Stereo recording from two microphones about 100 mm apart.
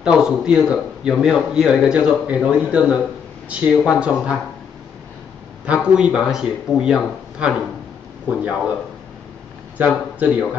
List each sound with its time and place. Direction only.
0.0 s a man's voice: 5° right (ahead or behind)
5.9 s a man's voice: 5° right (ahead or behind)
9.8 s a man's voice: 15° right (ahead or behind)